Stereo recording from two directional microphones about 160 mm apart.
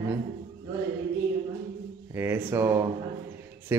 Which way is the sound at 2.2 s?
15° right (ahead or behind).